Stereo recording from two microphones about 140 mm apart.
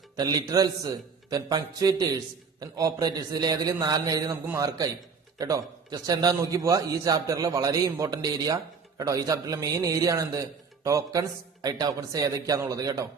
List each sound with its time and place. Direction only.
0.2 s a man's voice: 30° right (ahead or behind)